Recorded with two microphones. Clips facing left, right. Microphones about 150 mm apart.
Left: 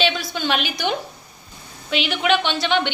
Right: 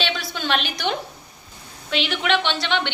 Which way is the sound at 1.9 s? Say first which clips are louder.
Left 2 dB; 5° left (ahead or behind).